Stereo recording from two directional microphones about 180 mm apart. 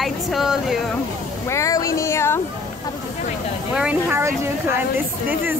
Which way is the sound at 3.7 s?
5° right (ahead or behind).